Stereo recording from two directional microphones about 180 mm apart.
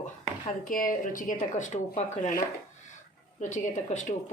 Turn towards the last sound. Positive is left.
turn(degrees=45)  # may be behind; listen again after turning